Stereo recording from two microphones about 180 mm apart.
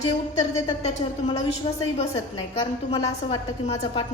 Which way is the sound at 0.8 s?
35° left (ahead or behind).